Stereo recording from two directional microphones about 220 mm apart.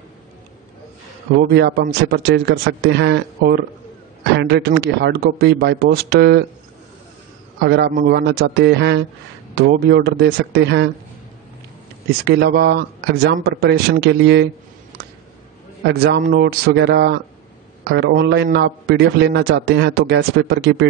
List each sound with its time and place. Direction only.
1.5 s a man's voice: 45° right (ahead or behind)
7.7 s a man's voice: 50° right (ahead or behind)
12.1 s a man's voice: 45° right (ahead or behind)
15.8 s a man's voice: 50° right (ahead or behind)